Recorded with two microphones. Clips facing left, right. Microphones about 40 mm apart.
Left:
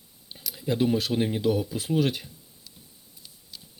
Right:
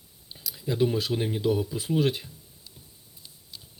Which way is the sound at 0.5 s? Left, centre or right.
Left.